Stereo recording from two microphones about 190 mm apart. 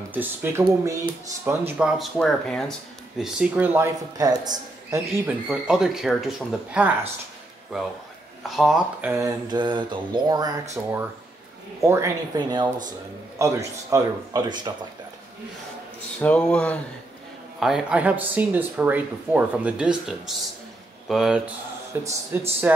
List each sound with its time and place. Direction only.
0.1 s a man's voice: 10° right (ahead or behind)
8.5 s mantra: centre (ahead or behind); by 10.6 s 20° right (ahead or behind)
10.7 s a man's voice: 10° right (ahead or behind)
16.2 s a man's voice: 10° left (ahead or behind)
21.9 s a man's voice: 15° right (ahead or behind)